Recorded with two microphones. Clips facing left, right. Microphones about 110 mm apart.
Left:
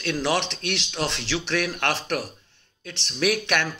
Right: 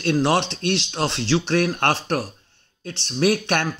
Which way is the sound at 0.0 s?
35° right (ahead or behind).